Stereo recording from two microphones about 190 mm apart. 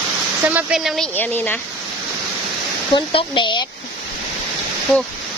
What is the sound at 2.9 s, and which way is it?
Speech, 25° left (ahead or behind).